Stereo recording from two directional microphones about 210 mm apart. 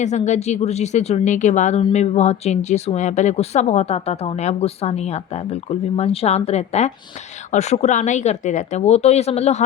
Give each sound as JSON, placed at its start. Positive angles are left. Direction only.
{"t": 0.0, "sound": "speech", "side_deg": 35}
{"t": 6.0, "sound": "speech", "side_deg": 30}